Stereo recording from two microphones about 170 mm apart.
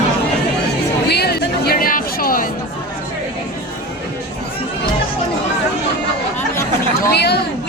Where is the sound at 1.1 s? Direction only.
70° left (ahead or behind).